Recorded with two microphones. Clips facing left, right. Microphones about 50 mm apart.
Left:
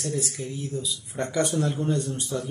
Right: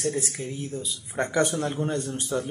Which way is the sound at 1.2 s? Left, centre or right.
Right.